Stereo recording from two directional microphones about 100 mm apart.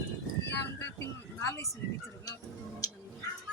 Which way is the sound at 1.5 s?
30° left (ahead or behind).